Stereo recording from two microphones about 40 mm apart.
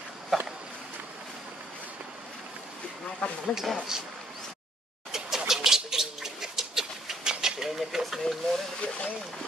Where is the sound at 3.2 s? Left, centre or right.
Left.